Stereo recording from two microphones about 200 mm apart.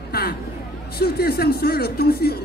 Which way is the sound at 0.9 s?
50° left (ahead or behind).